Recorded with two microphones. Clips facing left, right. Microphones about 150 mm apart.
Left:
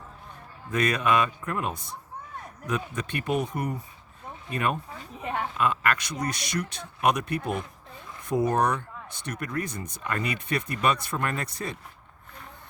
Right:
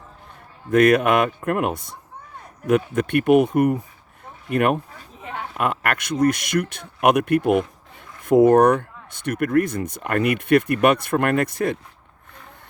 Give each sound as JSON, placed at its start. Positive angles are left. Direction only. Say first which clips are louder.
{"t": 0.7, "sound": "speech", "louder": "right 9 dB", "side_deg": -55}